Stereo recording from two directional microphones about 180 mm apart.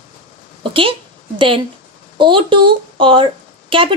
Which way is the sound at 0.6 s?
30° right (ahead or behind).